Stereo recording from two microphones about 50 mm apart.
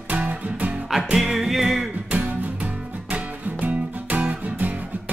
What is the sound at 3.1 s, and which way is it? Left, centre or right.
Music, right.